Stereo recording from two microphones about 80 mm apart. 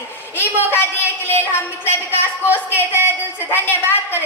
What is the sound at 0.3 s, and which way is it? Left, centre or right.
A woman's voice, left.